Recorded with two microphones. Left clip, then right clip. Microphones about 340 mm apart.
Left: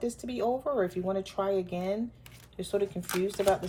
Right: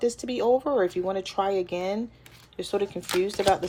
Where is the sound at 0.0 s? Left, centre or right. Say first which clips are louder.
Right 6 dB; right.